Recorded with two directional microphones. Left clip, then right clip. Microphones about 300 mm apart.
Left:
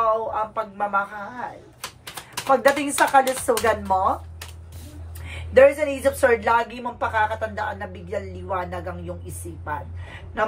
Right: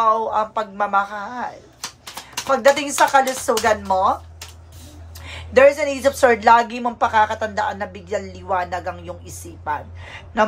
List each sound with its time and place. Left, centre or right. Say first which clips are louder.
0.0 s a woman's voice: right 4 dB; centre
2.4 s speech: right 2 dB; centre
5.5 s a woman's voice: right 2 dB; centre